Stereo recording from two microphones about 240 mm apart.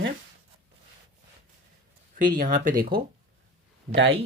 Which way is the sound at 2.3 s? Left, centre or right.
Right.